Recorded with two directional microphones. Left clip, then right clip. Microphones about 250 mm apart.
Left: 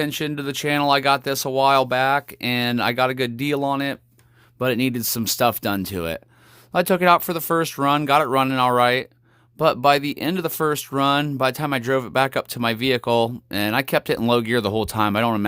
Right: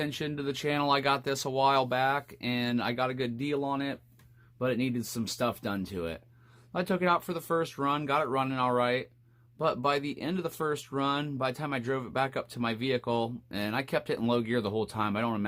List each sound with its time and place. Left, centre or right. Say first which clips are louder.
0.0 s speech: left 8 dB; left